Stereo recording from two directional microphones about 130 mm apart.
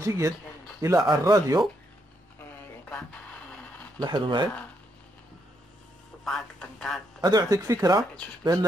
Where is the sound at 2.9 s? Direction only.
10° left (ahead or behind).